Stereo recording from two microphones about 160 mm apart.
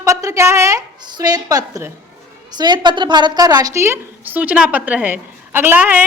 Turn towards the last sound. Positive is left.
turn(degrees=-10)  # may be behind; listen again after turning